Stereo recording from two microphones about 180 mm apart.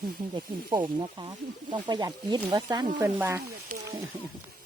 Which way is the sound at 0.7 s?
25° right (ahead or behind).